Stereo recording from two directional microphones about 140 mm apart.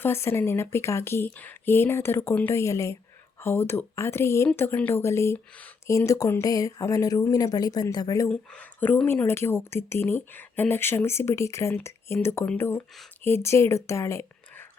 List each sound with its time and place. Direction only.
0.0 s speech: 20° left (ahead or behind)
8.3 s speech: 10° left (ahead or behind)